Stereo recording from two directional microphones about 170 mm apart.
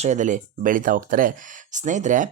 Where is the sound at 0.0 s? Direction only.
45° right (ahead or behind).